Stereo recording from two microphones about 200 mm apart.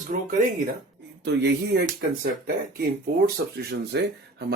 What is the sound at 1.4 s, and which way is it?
Speech, 60° right (ahead or behind).